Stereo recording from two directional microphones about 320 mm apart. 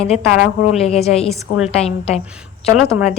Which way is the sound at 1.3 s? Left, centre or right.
Centre.